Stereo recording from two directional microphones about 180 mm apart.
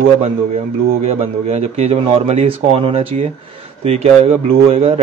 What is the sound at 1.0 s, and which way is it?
Speech, 35° right (ahead or behind).